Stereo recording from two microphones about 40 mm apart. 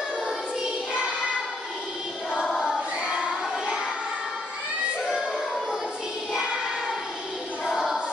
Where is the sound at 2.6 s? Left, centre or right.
Right.